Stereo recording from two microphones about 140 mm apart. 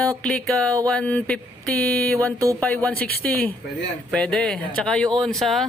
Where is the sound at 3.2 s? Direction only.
10° left (ahead or behind).